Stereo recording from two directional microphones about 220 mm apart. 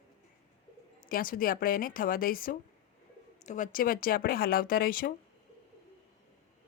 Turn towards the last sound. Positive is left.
turn(degrees=40)  # may be behind; listen again after turning